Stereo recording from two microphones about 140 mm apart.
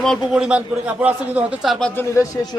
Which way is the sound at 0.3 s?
10° right (ahead or behind).